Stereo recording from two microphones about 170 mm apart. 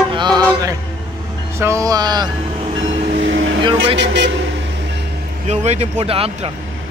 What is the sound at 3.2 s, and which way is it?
Vehicle, 90° right.